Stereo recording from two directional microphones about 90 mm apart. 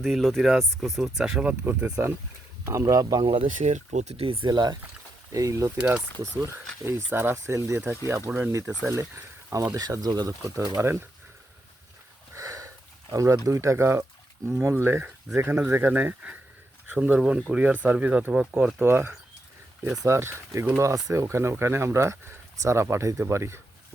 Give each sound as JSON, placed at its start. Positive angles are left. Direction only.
{"t": 0.0, "sound": "speech", "side_deg": 0}
{"t": 1.6, "sound": "speech", "side_deg": -25}
{"t": 2.6, "sound": "speech", "side_deg": -35}
{"t": 4.2, "sound": "speech", "side_deg": -90}
{"t": 4.4, "sound": "speech", "side_deg": -50}
{"t": 5.3, "sound": "speech", "side_deg": -35}
{"t": 6.8, "sound": "speech", "side_deg": -30}
{"t": 10.8, "sound": "speech", "side_deg": -25}
{"t": 12.3, "sound": "sniff", "side_deg": -40}
{"t": 14.4, "sound": "speech", "side_deg": -30}
{"t": 18.8, "sound": "speech", "side_deg": -25}